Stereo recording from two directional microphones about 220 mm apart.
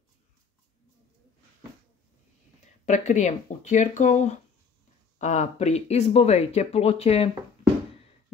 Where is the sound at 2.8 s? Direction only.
35° left (ahead or behind).